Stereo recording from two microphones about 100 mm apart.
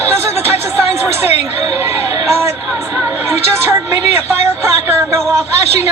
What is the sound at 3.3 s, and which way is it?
Speech, 25° right (ahead or behind).